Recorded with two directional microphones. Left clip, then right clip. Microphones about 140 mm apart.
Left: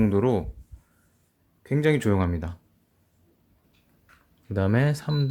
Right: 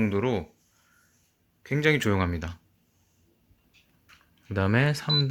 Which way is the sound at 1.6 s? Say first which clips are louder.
Left 1 dB; 20° left (ahead or behind).